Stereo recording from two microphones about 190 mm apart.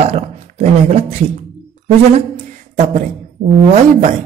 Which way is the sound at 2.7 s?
40° right (ahead or behind).